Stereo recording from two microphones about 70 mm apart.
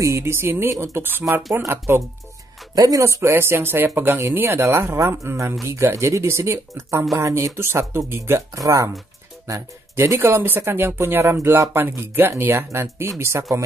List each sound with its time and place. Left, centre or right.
0.0 s speech: right
1.3 s speech: right
2.7 s speech: right
8.5 s speech: right
9.5 s speech: right